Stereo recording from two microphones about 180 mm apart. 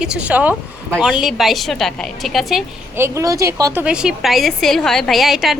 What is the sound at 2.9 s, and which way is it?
Speech, 15° right (ahead or behind).